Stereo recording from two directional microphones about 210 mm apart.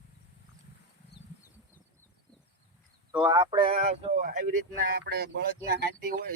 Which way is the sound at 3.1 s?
10° right (ahead or behind).